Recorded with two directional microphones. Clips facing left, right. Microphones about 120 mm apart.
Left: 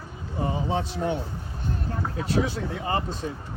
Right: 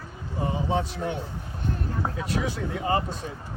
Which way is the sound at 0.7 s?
30° left (ahead or behind).